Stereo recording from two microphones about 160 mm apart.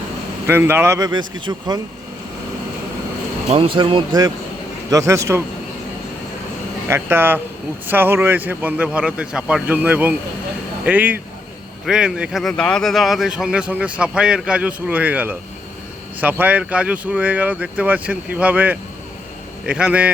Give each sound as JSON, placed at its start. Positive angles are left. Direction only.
{"t": 0.4, "sound": "speech", "side_deg": -15}
{"t": 3.5, "sound": "speech", "side_deg": -35}
{"t": 6.8, "sound": "speech", "side_deg": -15}